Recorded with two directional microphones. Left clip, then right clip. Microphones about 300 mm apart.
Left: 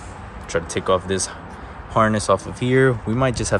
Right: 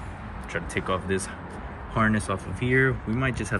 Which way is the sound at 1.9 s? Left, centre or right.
Centre.